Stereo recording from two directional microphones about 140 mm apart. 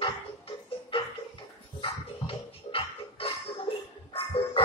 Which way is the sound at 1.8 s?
40° left (ahead or behind).